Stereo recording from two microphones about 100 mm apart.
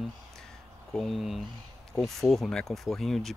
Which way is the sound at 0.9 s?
Centre (ahead or behind).